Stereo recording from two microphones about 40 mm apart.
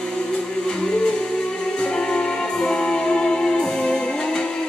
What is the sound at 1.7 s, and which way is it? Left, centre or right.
Music, left.